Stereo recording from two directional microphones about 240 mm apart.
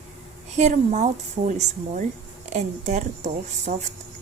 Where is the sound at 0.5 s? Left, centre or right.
Right.